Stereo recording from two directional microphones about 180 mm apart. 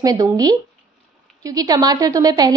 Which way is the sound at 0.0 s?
20° right (ahead or behind).